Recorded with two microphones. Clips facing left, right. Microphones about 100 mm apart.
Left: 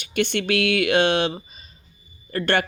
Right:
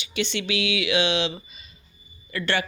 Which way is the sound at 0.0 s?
55° left (ahead or behind).